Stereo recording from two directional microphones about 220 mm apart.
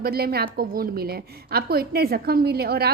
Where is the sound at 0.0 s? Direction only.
45° right (ahead or behind).